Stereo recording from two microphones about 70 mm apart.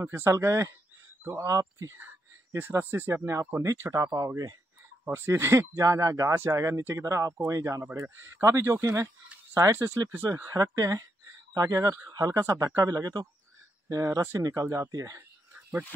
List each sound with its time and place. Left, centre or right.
0.0 s speech: right
2.5 s speech: right
5.0 s speech: right
8.4 s speech: right
8.6 s speech: right
10.5 s speech: right